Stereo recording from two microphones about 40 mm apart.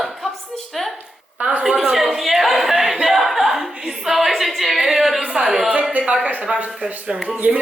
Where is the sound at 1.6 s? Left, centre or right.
Centre.